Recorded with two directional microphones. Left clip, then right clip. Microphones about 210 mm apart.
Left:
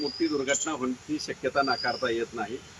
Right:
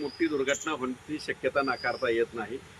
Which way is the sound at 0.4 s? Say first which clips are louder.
Left 1 dB; 45° left (ahead or behind).